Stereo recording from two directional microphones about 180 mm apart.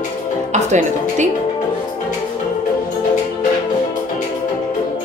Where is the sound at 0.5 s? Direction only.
40° right (ahead or behind).